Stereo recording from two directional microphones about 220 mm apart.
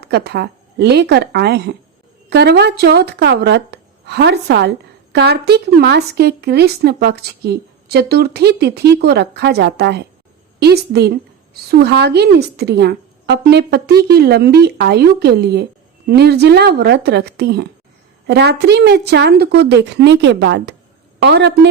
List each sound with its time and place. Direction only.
0.0 s a woman's voice: 50° right (ahead or behind)